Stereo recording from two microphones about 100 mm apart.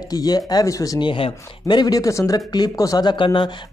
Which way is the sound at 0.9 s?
60° left (ahead or behind).